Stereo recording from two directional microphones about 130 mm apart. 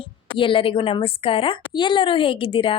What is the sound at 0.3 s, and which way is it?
Speech, 40° left (ahead or behind).